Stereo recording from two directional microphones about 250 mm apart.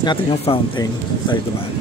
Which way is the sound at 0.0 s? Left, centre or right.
Centre.